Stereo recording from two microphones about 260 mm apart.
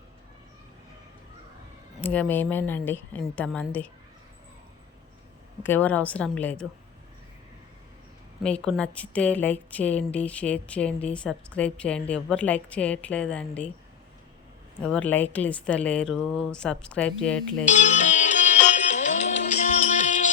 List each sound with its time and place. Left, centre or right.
2.0 s a woman's voice: centre
5.6 s speech: centre
8.4 s speech: centre
14.8 s speech: centre
17.7 s music: left